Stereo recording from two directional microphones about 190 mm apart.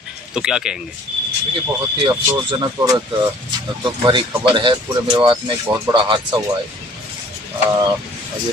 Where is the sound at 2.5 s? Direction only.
20° right (ahead or behind).